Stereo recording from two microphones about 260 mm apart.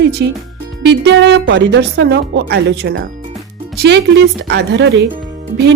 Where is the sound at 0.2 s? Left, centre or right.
Right.